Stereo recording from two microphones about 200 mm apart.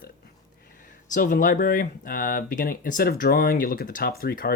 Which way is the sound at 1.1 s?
40° left (ahead or behind).